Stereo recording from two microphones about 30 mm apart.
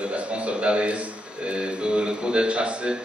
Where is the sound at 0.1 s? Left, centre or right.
Right.